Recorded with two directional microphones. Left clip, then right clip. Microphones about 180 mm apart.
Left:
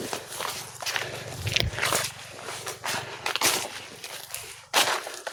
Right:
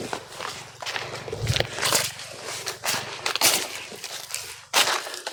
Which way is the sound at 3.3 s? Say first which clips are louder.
Right 3 dB; 60° right (ahead or behind).